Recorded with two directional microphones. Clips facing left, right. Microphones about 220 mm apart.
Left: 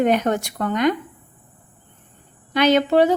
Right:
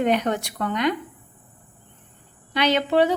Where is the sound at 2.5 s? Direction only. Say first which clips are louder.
Left 4 dB; 45° left (ahead or behind).